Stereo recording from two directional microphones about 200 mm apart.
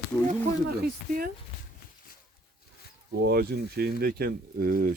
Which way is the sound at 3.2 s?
50° right (ahead or behind).